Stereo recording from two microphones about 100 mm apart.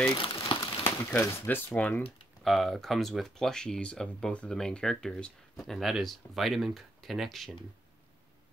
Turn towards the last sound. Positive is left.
turn(degrees=0)  # may be behind; listen again after turning